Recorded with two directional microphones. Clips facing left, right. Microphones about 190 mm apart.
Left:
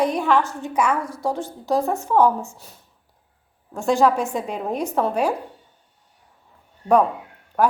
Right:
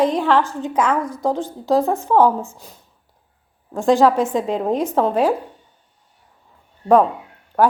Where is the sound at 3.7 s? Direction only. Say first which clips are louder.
Right 4 dB; 90° right.